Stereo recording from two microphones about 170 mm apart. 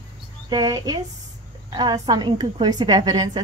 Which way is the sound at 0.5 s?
20° right (ahead or behind).